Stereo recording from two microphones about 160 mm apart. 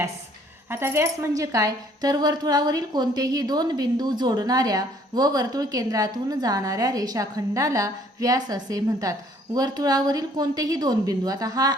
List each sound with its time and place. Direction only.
0.7 s speech: 15° right (ahead or behind)